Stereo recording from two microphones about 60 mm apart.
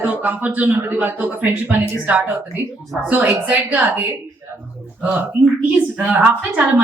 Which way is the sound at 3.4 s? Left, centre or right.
Right.